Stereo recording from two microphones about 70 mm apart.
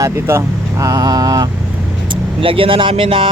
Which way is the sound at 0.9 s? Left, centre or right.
Right.